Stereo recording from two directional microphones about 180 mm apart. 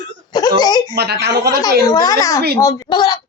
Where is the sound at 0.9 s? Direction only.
65° right (ahead or behind).